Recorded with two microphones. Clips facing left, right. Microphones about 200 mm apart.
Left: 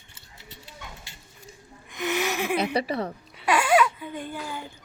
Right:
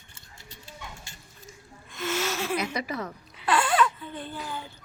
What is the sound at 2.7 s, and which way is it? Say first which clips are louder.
Speech: left 5 dB; 30° left (ahead or behind).